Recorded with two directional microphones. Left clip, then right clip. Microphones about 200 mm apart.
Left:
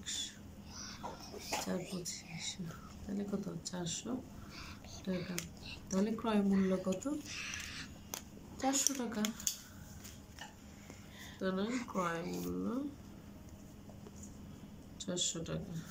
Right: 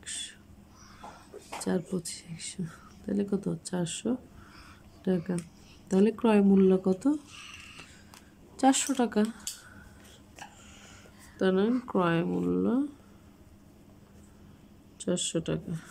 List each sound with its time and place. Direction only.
0.0 s crow: 40° right (ahead or behind)
1.7 s speech: 40° right (ahead or behind)
8.5 s speech: 50° right (ahead or behind)
11.3 s speech: 45° right (ahead or behind)
15.0 s speech: 45° right (ahead or behind)